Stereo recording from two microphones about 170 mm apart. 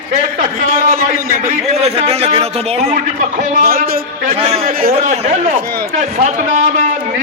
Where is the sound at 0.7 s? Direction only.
55° right (ahead or behind).